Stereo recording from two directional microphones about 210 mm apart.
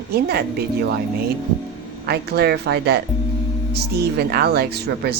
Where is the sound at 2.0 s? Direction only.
50° right (ahead or behind).